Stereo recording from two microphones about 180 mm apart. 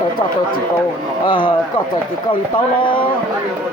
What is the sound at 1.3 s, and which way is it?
Speech, 25° left (ahead or behind).